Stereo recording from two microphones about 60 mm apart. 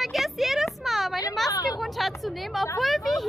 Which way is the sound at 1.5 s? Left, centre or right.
Left.